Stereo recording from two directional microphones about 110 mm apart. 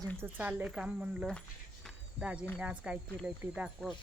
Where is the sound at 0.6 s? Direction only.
5° right (ahead or behind).